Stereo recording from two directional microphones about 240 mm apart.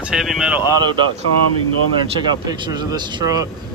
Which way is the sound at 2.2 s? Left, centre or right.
Centre.